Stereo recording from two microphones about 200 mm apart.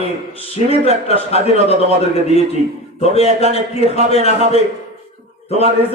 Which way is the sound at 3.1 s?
30° left (ahead or behind).